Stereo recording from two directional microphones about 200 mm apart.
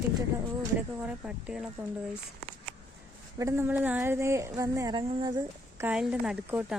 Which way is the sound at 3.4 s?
15° right (ahead or behind).